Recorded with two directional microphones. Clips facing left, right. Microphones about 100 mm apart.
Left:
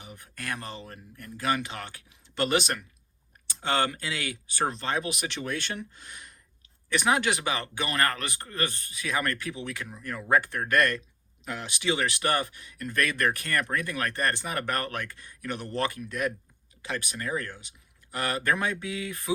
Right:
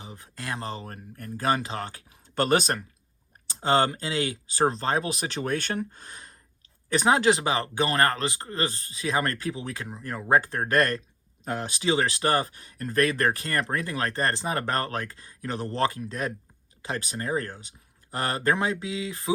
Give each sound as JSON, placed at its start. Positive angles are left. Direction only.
{"t": 0.0, "sound": "speech", "side_deg": -30}